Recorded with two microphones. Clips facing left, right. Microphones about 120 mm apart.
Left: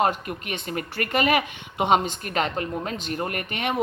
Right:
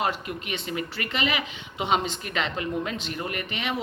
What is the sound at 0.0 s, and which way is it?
Speech, 45° left (ahead or behind).